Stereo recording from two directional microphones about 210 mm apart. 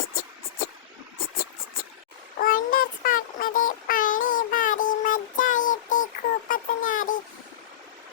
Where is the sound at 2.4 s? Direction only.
45° left (ahead or behind).